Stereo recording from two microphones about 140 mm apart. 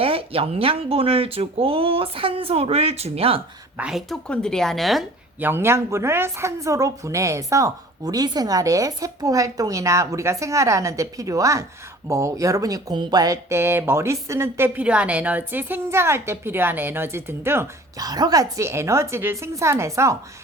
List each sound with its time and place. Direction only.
0.0 s speech: 40° right (ahead or behind)
3.8 s a woman's voice: 5° right (ahead or behind)
5.4 s speech: 15° right (ahead or behind)